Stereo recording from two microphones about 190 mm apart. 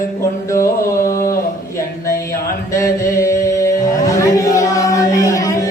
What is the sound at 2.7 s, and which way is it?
Mantra, 15° left (ahead or behind).